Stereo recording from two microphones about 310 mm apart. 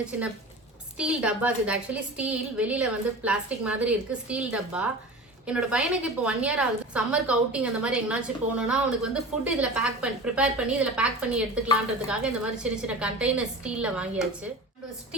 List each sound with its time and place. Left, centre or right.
0.9 s a woman's voice: centre